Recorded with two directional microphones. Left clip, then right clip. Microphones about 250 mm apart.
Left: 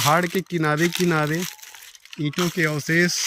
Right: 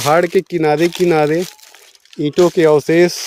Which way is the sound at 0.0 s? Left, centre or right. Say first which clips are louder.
Right 7 dB; centre.